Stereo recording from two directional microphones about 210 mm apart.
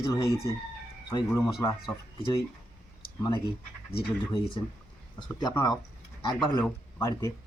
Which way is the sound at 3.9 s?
20° left (ahead or behind).